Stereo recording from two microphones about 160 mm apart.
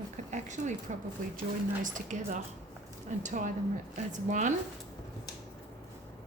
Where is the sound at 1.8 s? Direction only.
50° right (ahead or behind).